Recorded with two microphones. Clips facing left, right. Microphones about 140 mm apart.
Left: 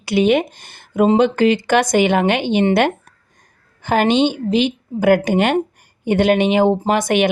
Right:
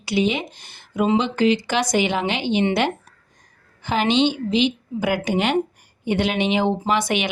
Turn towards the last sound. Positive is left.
turn(degrees=50)  # may be behind; listen again after turning